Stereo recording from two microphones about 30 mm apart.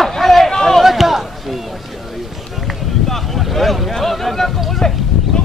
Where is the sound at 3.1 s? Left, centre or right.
Centre.